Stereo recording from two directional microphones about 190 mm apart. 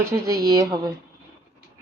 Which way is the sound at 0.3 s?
20° right (ahead or behind).